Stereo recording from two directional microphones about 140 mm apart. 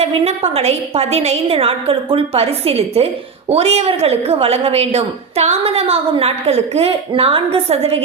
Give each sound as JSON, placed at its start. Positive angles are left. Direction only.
{"t": 0.0, "sound": "a woman's voice", "side_deg": -50}